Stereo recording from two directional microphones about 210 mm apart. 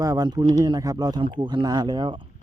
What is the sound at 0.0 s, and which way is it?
Speech, 20° right (ahead or behind).